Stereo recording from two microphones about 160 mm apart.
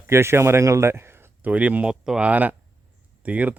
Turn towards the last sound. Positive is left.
turn(degrees=-10)  # may be behind; listen again after turning